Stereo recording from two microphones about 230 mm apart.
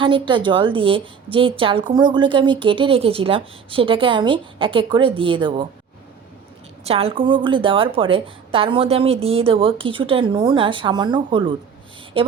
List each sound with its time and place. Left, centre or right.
0.0 s a woman's voice: right
6.8 s a woman's voice: right